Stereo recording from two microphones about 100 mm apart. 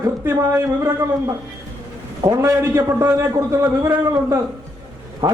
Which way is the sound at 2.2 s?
30° right (ahead or behind).